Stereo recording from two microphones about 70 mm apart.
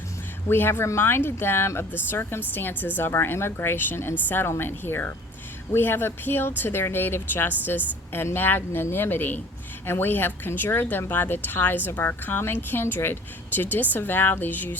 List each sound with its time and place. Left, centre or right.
0.4 s speech: left